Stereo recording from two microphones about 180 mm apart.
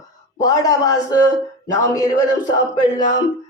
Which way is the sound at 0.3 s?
20° left (ahead or behind).